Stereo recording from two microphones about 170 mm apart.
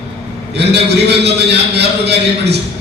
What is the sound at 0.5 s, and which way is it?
A man's voice, 75° right (ahead or behind).